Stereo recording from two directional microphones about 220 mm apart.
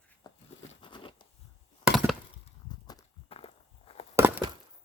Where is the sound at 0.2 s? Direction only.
20° left (ahead or behind).